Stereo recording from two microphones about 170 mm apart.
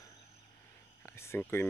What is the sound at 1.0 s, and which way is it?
Speech, 15° left (ahead or behind).